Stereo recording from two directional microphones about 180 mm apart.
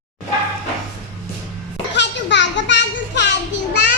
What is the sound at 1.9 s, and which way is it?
Children playing, 75° left (ahead or behind).